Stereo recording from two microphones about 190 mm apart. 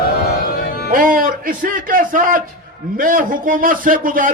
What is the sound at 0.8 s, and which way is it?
A man's voice, 45° right (ahead or behind).